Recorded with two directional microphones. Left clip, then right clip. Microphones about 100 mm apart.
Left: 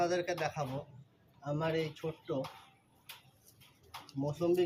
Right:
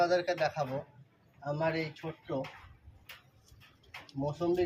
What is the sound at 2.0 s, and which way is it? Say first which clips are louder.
Speech: left 2 dB; 20° left (ahead or behind).